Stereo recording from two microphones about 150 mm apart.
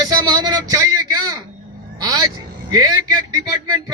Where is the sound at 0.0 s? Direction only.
25° right (ahead or behind).